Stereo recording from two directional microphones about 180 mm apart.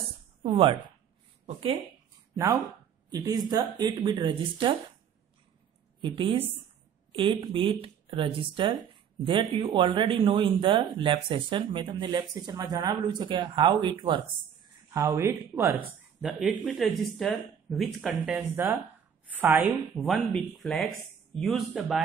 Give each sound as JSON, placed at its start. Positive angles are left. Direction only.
{"t": 0.4, "sound": "speech", "side_deg": -30}
{"t": 2.3, "sound": "speech", "side_deg": -15}
{"t": 5.9, "sound": "a woman's voice", "side_deg": -30}
{"t": 16.2, "sound": "speech", "side_deg": 0}